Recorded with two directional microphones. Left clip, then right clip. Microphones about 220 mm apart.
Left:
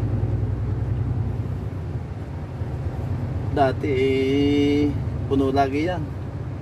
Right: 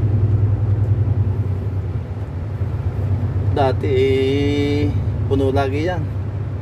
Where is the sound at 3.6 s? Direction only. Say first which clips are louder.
Right 3 dB; 15° right (ahead or behind).